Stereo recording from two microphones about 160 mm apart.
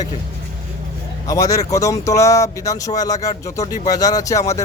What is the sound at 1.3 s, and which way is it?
Speech, 20° left (ahead or behind).